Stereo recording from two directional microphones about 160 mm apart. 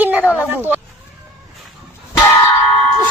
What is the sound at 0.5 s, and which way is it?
Speech, 10° right (ahead or behind).